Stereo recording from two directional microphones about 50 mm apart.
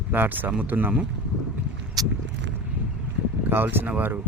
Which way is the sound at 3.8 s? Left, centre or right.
Right.